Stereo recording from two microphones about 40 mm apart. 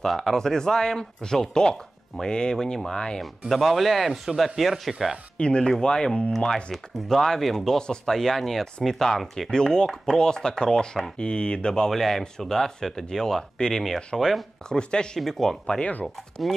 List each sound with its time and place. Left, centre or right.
0.0 s speech: centre
3.2 s speech: centre
5.4 s speech: left; by 9.5 s centre
9.5 s speech: centre
11.9 s speech: centre
14.8 s speech: left
15.1 s speech: centre
15.8 s speech: left